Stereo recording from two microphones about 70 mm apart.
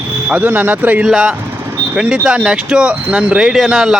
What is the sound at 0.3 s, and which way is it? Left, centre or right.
Speech, right.